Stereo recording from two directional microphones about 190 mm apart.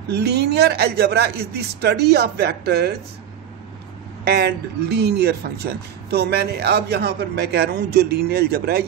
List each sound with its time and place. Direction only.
0.1 s speech: 60° right (ahead or behind)
4.3 s speech: 60° right (ahead or behind)